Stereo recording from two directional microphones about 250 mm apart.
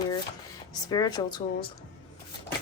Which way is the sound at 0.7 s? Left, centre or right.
Centre.